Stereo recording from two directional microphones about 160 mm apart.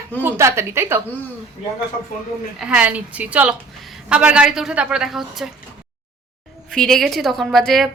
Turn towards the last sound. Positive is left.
turn(degrees=0)  # may be behind; listen again after turning